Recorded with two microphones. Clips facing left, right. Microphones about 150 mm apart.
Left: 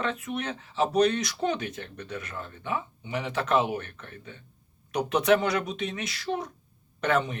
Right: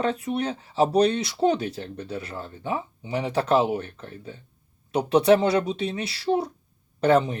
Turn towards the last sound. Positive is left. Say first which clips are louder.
# right 6 dB
turn(degrees=-35)  # may be behind; listen again after turning